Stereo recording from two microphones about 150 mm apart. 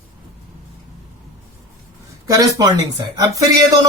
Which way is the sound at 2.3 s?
25° right (ahead or behind).